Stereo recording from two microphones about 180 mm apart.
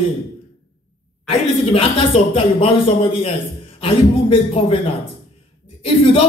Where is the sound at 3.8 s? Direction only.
30° left (ahead or behind).